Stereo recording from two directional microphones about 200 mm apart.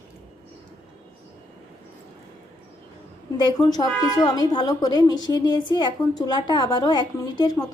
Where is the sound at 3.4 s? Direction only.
20° left (ahead or behind).